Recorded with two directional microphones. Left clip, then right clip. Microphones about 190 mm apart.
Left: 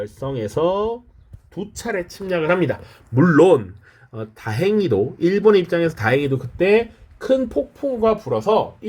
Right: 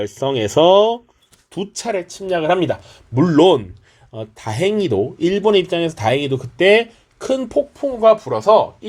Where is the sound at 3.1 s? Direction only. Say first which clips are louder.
Right 1 dB; 25° right (ahead or behind).